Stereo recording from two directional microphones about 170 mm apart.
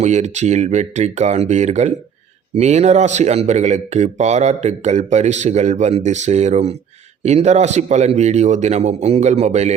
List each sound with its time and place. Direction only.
0.0 s speech: 45° right (ahead or behind)